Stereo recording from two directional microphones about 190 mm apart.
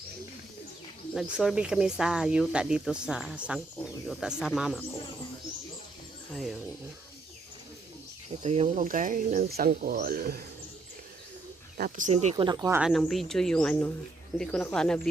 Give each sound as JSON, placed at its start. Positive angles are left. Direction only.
{"t": 1.1, "sound": "speech", "side_deg": -5}
{"t": 6.3, "sound": "speech", "side_deg": 0}
{"t": 8.4, "sound": "speech", "side_deg": -35}
{"t": 11.8, "sound": "speech", "side_deg": -40}
{"t": 12.9, "sound": "speech", "side_deg": 0}